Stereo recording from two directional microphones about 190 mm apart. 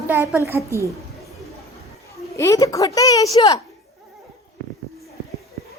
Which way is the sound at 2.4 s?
15° left (ahead or behind).